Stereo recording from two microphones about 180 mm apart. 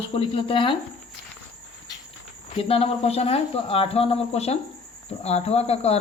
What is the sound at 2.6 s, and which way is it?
Speech, 35° left (ahead or behind).